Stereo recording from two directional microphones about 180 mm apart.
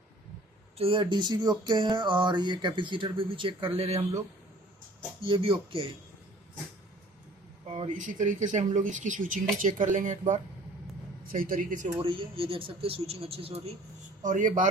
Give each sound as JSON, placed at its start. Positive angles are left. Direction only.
{"t": 0.8, "sound": "speech", "side_deg": -30}
{"t": 5.2, "sound": "speech", "side_deg": -30}
{"t": 7.7, "sound": "speech", "side_deg": -40}
{"t": 12.0, "sound": "speech", "side_deg": -30}
{"t": 14.2, "sound": "speech", "side_deg": -45}